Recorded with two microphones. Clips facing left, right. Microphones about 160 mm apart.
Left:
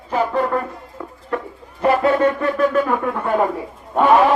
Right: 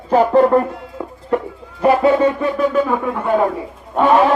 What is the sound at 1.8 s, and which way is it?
Speech, 15° right (ahead or behind).